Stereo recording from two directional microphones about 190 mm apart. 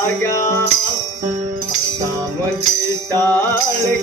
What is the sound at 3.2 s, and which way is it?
Music, 15° left (ahead or behind).